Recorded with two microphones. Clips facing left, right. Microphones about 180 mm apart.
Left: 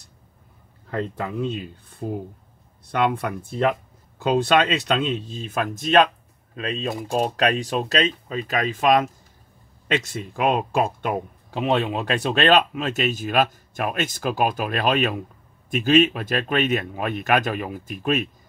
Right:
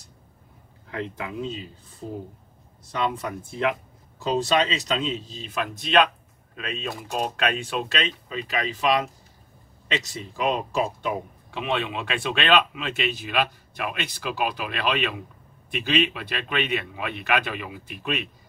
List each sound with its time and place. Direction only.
1.4 s speech: 60° left (ahead or behind)
11.5 s speech: 40° left (ahead or behind)